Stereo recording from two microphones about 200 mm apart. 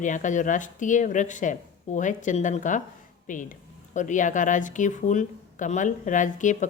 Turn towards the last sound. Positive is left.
turn(degrees=40)  # may be behind; listen again after turning